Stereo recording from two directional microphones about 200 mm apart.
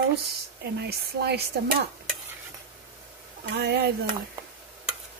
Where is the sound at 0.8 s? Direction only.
55° right (ahead or behind).